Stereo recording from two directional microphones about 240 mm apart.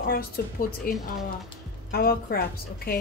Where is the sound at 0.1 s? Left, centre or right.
Left.